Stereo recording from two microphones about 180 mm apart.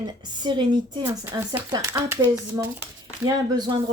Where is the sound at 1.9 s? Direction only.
10° right (ahead or behind).